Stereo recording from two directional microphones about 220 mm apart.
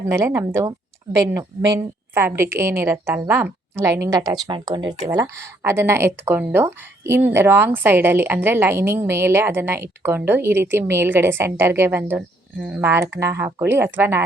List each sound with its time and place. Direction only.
0.1 s speech: 10° right (ahead or behind)